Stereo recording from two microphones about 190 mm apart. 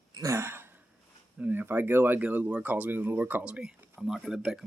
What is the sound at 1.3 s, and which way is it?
Speech, 10° right (ahead or behind).